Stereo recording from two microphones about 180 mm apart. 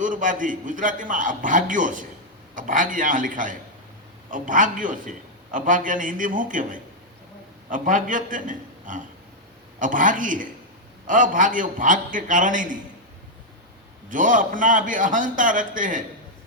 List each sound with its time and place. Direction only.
0.0 s a man's voice: 45° right (ahead or behind)
14.1 s a man's voice: 45° right (ahead or behind)